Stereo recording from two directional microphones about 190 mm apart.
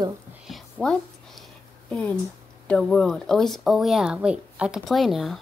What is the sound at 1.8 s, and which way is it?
Speech, 5° left (ahead or behind).